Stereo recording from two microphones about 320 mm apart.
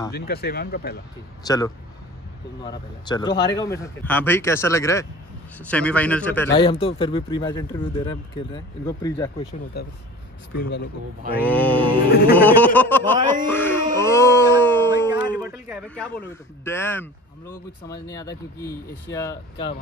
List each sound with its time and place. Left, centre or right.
0.1 s speech: left
1.4 s speech: centre
9.8 s speech: left
11.4 s speech: centre
12.1 s speech: left
12.4 s speech: centre
13.5 s a sound: centre
15.1 s speech: centre